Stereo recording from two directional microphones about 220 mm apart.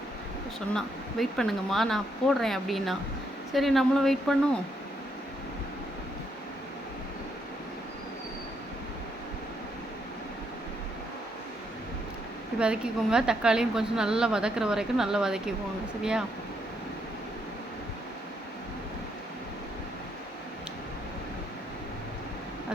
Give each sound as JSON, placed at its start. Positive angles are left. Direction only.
{"t": 0.7, "sound": "a woman's voice", "side_deg": 0}
{"t": 12.5, "sound": "a woman's voice", "side_deg": -5}